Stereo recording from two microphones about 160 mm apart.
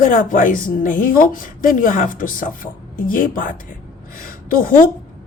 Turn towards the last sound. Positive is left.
turn(degrees=65)  # may be behind; listen again after turning